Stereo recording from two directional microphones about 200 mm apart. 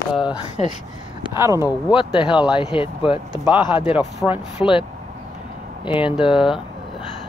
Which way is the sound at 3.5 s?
20° left (ahead or behind).